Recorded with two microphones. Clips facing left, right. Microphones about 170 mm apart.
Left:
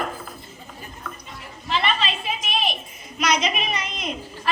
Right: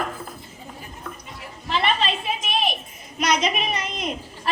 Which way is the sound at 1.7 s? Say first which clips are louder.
Right 1 dB; 50° right (ahead or behind).